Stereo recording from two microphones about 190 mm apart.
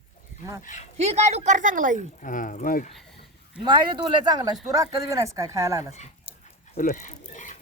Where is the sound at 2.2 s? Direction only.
45° left (ahead or behind).